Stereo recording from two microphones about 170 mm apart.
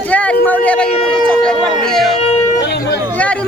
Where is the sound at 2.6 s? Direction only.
75° left (ahead or behind).